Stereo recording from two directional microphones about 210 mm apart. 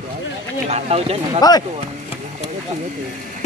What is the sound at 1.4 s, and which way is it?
Speech, 20° left (ahead or behind).